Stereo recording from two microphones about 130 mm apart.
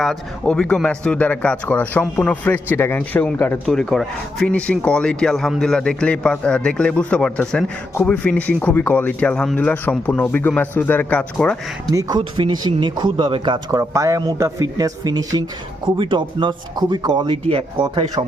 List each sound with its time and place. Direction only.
0.0 s speech: 5° left (ahead or behind)
3.7 s speech: 5° left (ahead or behind)
11.9 s speech: 25° right (ahead or behind)